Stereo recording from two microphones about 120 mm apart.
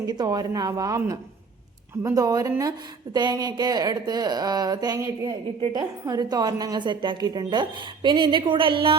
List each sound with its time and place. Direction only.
0.0 s a woman's voice: 35° right (ahead or behind)